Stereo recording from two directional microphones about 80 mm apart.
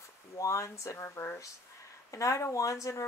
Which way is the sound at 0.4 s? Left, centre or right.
Left.